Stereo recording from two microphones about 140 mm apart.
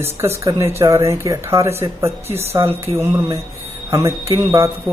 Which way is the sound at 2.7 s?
20° right (ahead or behind).